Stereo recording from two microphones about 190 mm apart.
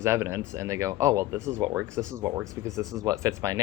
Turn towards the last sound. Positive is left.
turn(degrees=-15)  # may be behind; listen again after turning